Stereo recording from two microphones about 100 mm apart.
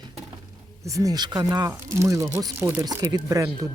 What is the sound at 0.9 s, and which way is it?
Speech, 35° right (ahead or behind).